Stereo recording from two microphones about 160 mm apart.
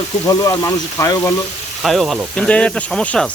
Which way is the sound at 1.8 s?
Centre (ahead or behind).